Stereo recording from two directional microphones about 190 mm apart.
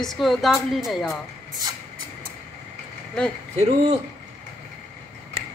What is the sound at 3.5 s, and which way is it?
Speech, 35° right (ahead or behind).